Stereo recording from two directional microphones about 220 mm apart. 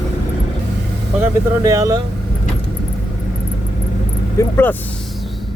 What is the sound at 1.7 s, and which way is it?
Speech, 15° right (ahead or behind).